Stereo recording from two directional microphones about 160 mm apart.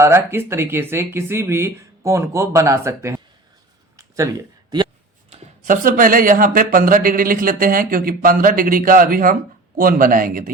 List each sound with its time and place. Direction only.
0.0 s speech: 15° right (ahead or behind)
3.9 s a sound: 20° right (ahead or behind)
5.6 s speech: 60° right (ahead or behind)